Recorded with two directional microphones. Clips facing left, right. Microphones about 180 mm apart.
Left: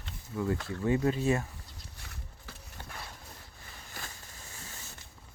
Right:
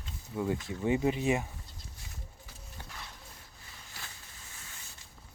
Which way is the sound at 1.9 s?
65° left (ahead or behind).